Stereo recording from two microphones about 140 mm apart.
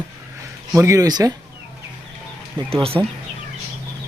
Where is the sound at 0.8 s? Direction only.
20° right (ahead or behind).